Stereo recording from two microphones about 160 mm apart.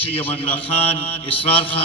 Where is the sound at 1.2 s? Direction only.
35° left (ahead or behind).